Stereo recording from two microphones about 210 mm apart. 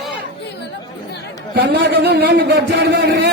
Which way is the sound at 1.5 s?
55° right (ahead or behind).